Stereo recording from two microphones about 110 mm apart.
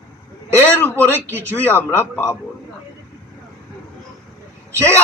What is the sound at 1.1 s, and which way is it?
Speech, 20° right (ahead or behind).